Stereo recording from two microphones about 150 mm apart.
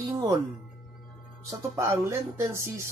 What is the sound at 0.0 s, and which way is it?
Music, 20° right (ahead or behind).